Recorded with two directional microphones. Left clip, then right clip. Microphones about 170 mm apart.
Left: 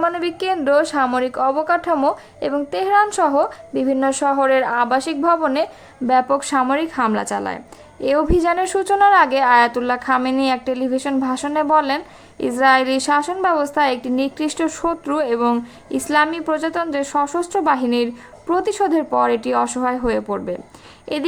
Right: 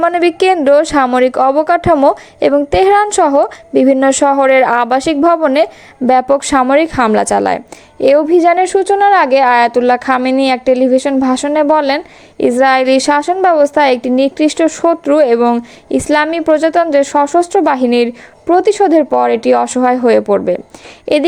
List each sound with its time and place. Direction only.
0.0 s a woman's voice: 40° right (ahead or behind)